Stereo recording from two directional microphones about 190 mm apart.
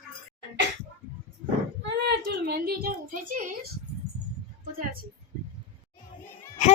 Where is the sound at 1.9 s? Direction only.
60° right (ahead or behind).